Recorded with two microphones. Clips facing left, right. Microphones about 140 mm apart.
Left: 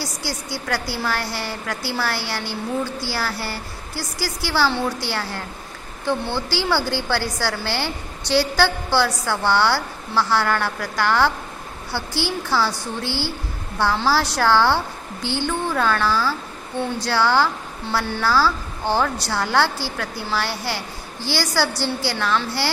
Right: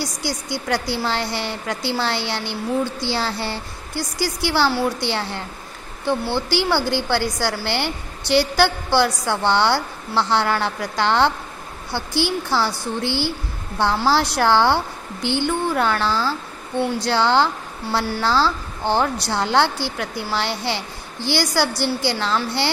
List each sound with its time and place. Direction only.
0.0 s a woman's voice: 15° right (ahead or behind)